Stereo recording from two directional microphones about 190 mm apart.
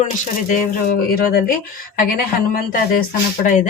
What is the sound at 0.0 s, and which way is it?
A woman's voice, 45° left (ahead or behind).